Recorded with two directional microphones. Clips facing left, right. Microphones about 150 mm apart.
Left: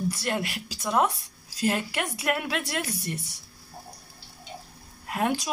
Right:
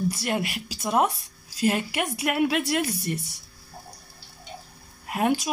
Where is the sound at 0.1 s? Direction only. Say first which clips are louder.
Right 2 dB; 10° right (ahead or behind).